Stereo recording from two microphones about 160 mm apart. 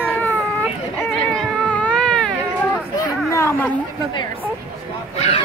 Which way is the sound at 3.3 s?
15° left (ahead or behind).